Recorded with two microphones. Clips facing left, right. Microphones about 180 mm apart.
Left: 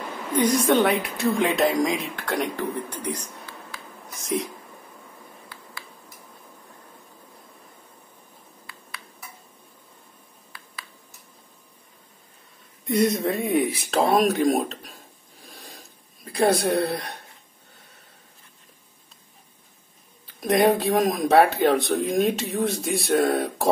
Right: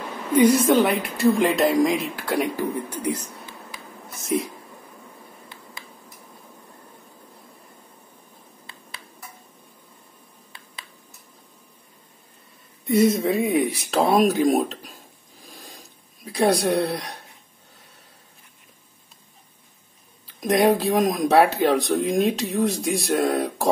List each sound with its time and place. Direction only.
0.3 s speech: 10° right (ahead or behind)
5.5 s a sound: 20° right (ahead or behind)
12.8 s speech: centre (ahead or behind)
15.4 s filing: centre (ahead or behind)
16.3 s speech: centre (ahead or behind)
20.2 s speech: centre (ahead or behind)